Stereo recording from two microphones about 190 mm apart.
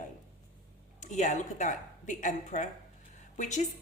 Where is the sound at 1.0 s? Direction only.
40° left (ahead or behind).